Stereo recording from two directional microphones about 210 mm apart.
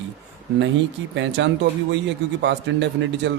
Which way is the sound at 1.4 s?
60° right (ahead or behind).